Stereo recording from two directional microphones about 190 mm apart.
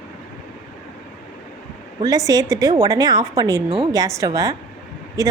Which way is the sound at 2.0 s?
20° right (ahead or behind).